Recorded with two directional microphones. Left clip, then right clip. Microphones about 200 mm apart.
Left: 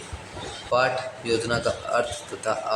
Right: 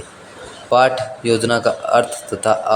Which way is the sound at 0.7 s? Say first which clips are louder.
Right 9 dB; 35° right (ahead or behind).